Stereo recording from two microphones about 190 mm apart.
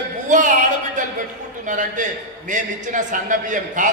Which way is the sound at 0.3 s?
40° right (ahead or behind).